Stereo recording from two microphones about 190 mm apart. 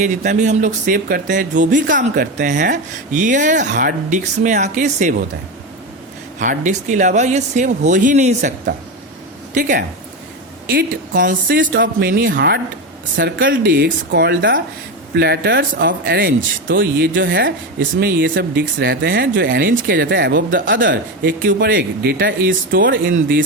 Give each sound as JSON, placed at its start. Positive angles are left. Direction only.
{"t": 0.0, "sound": "speech", "side_deg": -40}
{"t": 6.4, "sound": "speech", "side_deg": -40}
{"t": 9.6, "sound": "speech", "side_deg": -45}
{"t": 16.6, "sound": "speech", "side_deg": -70}
{"t": 18.8, "sound": "speech", "side_deg": -70}
{"t": 20.5, "sound": "speech", "side_deg": -45}
{"t": 20.9, "sound": "speech", "side_deg": -70}
{"t": 21.4, "sound": "speech", "side_deg": -55}